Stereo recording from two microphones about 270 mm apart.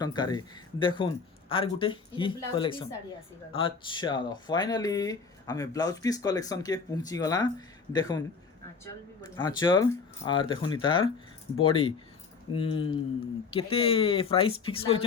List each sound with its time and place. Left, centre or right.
0.0 s speech: centre
9.3 s speech: centre